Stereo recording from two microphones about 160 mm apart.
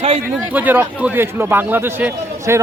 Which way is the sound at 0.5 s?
10° right (ahead or behind).